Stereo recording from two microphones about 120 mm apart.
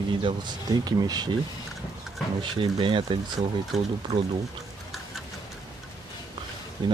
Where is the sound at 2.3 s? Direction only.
45° right (ahead or behind).